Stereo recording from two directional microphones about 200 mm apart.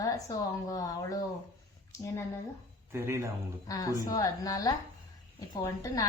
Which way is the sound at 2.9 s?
10° right (ahead or behind).